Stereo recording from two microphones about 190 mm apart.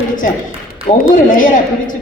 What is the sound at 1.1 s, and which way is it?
Speech, 45° left (ahead or behind).